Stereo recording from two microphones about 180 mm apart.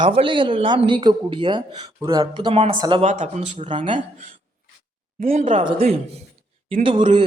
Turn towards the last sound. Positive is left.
turn(degrees=-30)  # may be behind; listen again after turning